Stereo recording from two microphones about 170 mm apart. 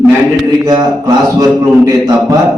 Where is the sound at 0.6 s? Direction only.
25° right (ahead or behind).